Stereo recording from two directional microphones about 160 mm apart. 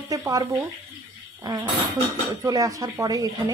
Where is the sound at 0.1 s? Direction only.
20° right (ahead or behind).